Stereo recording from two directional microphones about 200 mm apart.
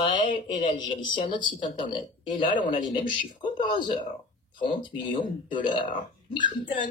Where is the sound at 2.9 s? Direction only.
25° left (ahead or behind).